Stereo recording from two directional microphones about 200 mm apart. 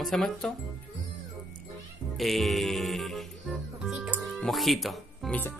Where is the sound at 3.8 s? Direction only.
Centre (ahead or behind).